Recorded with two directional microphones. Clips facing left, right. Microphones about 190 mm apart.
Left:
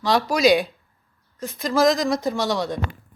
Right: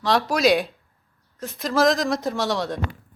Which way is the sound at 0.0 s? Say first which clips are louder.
Left 1 dB; centre (ahead or behind).